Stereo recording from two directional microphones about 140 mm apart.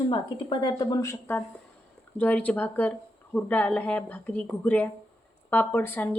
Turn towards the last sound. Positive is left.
turn(degrees=15)  # may be behind; listen again after turning